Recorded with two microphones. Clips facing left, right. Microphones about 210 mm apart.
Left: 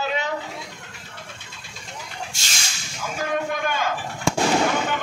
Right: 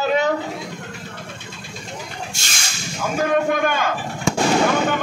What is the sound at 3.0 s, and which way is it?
Speech, 55° right (ahead or behind).